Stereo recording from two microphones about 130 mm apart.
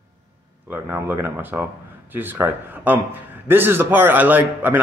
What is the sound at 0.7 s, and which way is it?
Speech, 15° right (ahead or behind).